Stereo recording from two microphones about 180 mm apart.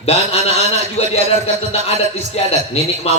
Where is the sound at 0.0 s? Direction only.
35° left (ahead or behind).